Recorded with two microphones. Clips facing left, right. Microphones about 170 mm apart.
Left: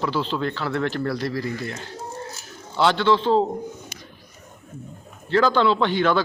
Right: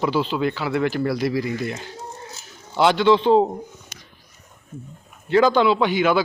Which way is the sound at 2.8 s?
15° right (ahead or behind).